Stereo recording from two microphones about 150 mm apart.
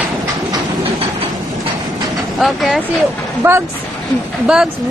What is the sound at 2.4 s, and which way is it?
Speech, centre (ahead or behind).